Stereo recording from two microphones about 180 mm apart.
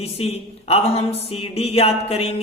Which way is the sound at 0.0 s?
35° left (ahead or behind).